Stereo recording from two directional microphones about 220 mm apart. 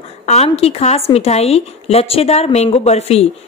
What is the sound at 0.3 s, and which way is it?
A woman's voice, 30° left (ahead or behind).